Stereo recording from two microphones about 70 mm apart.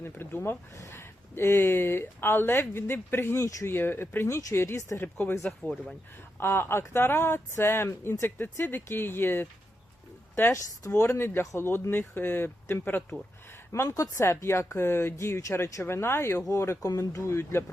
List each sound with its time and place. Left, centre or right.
0.2 s speech: left
3.3 s speech: left
3.7 s speech: left
4.3 s speech: left
4.5 s speech: left
5.0 s speech: left
6.4 s speech: left
13.8 s speech: left
14.1 s speech: left